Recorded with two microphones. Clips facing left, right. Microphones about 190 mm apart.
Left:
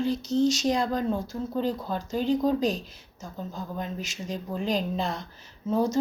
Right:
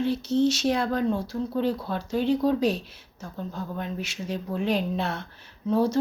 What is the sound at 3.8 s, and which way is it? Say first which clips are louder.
Speech: right 1 dB; centre (ahead or behind).